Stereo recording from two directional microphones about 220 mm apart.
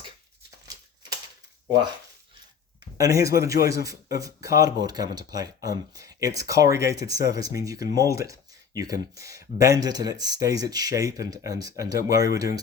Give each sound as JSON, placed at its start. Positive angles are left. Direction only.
{"t": 3.0, "sound": "speech", "side_deg": -15}